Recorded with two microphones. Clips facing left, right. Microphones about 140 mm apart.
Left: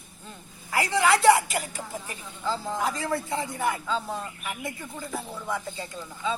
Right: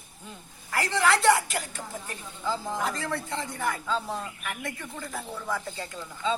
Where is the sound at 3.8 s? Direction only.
Centre (ahead or behind).